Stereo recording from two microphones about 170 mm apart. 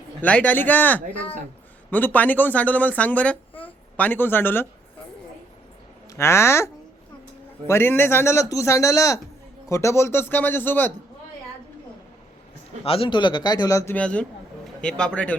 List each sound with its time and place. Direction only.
0.2 s a man's voice: 10° left (ahead or behind)
6.1 s a man's voice: 15° left (ahead or behind)
7.7 s a man's voice: 15° left (ahead or behind)
12.8 s a man's voice: 35° left (ahead or behind); by 15.4 s 5° left (ahead or behind)